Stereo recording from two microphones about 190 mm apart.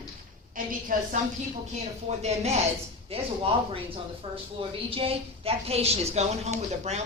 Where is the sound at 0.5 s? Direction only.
45° right (ahead or behind).